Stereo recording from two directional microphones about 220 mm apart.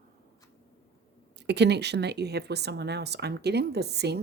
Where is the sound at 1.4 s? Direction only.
50° right (ahead or behind).